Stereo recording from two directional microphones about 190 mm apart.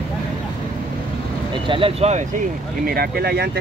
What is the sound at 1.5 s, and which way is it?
Speech, 25° right (ahead or behind).